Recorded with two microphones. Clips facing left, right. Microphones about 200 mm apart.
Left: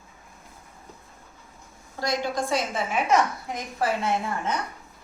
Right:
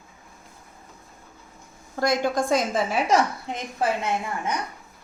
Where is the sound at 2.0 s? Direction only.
50° right (ahead or behind).